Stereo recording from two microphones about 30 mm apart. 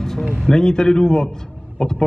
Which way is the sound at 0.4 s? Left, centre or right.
Left.